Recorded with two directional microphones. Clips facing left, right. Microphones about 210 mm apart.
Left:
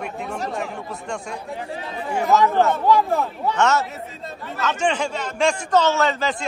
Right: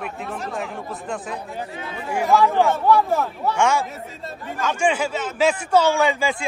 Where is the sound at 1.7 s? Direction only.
35° left (ahead or behind).